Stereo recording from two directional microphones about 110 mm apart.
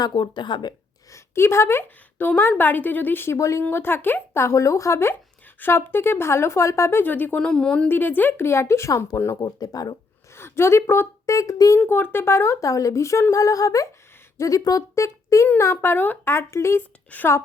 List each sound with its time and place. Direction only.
0.1 s speech: 45° left (ahead or behind)
1.1 s a woman's voice: 25° left (ahead or behind)
10.3 s a woman's voice: 25° left (ahead or behind)
11.8 s a woman's voice: 20° left (ahead or behind)
17.1 s a woman's voice: 15° left (ahead or behind)